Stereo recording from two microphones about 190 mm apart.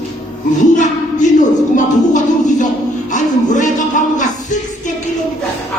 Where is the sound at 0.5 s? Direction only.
40° left (ahead or behind).